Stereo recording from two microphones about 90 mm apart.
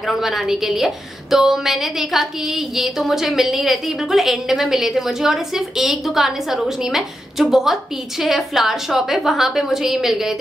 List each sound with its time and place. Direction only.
0.0 s a woman's voice: centre (ahead or behind)